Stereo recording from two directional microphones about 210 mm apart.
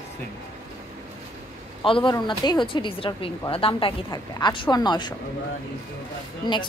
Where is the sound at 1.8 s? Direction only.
25° left (ahead or behind).